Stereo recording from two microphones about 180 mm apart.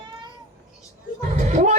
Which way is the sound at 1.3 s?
40° right (ahead or behind).